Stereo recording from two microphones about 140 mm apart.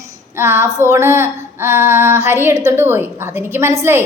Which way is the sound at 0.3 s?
15° right (ahead or behind).